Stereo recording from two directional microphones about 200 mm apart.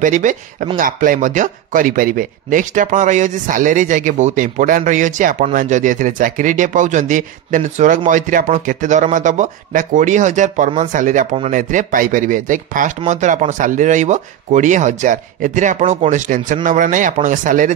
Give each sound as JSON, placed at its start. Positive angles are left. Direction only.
{"t": 0.0, "sound": "speech", "side_deg": -40}